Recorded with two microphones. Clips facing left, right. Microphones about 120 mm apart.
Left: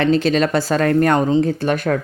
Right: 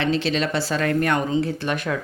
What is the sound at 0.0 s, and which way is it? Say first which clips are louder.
Speech: left 6 dB; 45° left (ahead or behind).